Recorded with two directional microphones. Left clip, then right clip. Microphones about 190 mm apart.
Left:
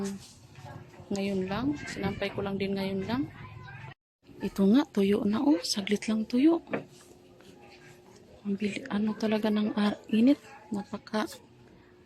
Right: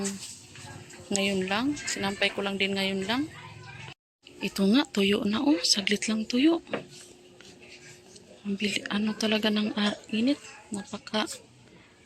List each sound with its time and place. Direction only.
0.0 s a woman's voice: centre (ahead or behind)
4.4 s speech: 15° left (ahead or behind)
8.5 s speech: 5° left (ahead or behind)